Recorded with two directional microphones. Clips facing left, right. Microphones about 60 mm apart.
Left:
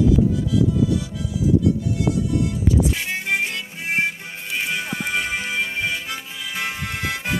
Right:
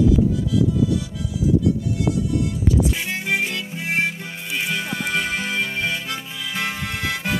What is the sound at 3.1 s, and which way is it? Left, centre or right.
Music, left.